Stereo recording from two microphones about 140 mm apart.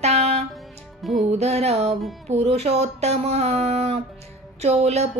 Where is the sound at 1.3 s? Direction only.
50° right (ahead or behind).